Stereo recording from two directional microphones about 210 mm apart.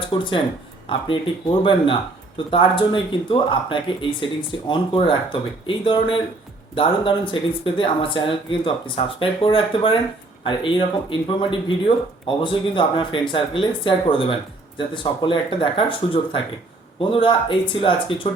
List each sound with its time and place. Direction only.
0.1 s speech: 25° left (ahead or behind)